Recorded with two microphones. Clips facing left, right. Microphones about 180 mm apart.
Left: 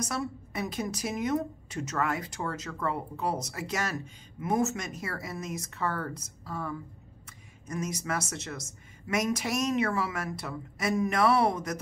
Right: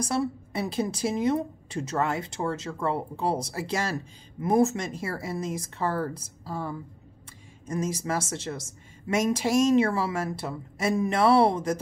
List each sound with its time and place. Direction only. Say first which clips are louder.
0.0 s a woman's voice: right 6 dB; 30° right (ahead or behind)